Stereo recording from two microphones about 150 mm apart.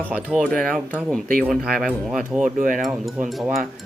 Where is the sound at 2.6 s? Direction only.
60° right (ahead or behind).